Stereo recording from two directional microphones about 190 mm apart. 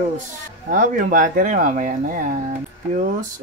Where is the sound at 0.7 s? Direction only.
40° right (ahead or behind).